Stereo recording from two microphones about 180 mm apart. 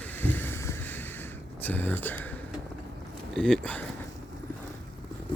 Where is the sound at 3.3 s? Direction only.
5° left (ahead or behind).